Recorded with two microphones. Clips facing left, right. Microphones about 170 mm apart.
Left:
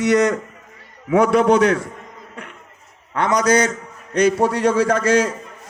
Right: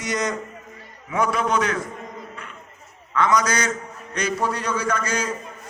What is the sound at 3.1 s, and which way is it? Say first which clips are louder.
A man's voice: left 4 dB; 65° left (ahead or behind).